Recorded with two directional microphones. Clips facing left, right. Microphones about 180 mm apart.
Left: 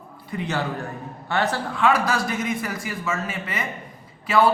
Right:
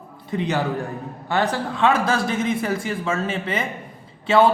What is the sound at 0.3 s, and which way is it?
Speech, 20° right (ahead or behind).